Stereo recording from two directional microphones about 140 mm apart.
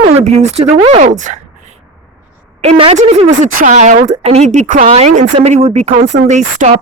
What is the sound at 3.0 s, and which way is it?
A woman's voice, 60° right (ahead or behind).